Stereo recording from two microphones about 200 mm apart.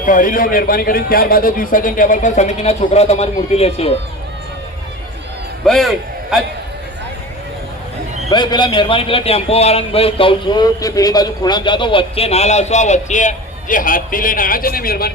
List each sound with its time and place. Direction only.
0.0 s a man's voice: 40° left (ahead or behind)
5.6 s a man's voice: centre (ahead or behind)
8.3 s a man's voice: 20° left (ahead or behind); by 15.1 s 50° left (ahead or behind)